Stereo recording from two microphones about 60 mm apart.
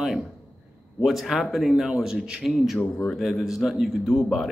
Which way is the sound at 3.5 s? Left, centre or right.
Centre.